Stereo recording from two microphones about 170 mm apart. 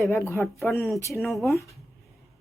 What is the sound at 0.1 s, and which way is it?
Speech, 15° left (ahead or behind).